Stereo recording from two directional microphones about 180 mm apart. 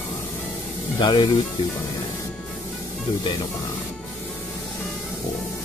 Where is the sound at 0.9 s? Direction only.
25° left (ahead or behind).